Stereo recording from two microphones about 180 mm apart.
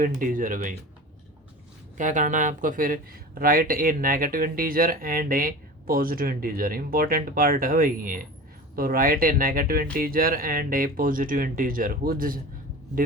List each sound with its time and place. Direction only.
0.0 s speech: 50° right (ahead or behind)
2.0 s speech: 45° right (ahead or behind)